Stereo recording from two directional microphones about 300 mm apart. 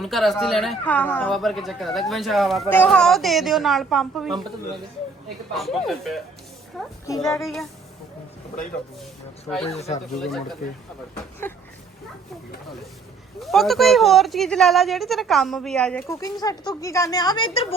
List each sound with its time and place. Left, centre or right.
0.0 s speech: centre
5.5 s speech: centre
9.6 s speech: left
10.2 s speech: centre
11.4 s speech: centre
13.4 s speech: centre